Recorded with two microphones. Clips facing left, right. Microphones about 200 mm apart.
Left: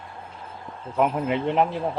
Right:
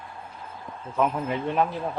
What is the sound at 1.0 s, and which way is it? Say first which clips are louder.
Speech: left 3 dB; 15° left (ahead or behind).